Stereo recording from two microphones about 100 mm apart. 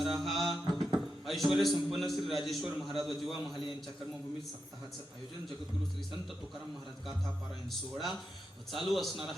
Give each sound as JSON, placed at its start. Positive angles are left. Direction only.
{"t": 0.0, "sound": "mantra", "side_deg": 0}
{"t": 0.9, "sound": "a man's voice", "side_deg": 0}
{"t": 7.7, "sound": "a man's voice", "side_deg": 0}